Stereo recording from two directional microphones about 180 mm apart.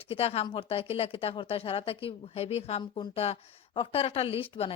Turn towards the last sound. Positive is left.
turn(degrees=30)  # may be behind; listen again after turning